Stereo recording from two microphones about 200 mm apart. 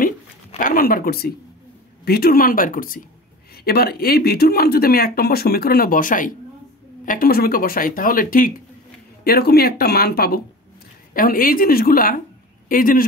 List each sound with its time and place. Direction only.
0.5 s speech: 40° left (ahead or behind)